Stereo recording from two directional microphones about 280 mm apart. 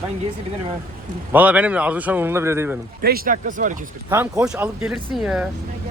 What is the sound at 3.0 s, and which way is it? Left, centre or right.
Speech, right.